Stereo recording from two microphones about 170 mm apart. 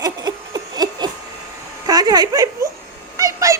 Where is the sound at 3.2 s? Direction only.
20° right (ahead or behind).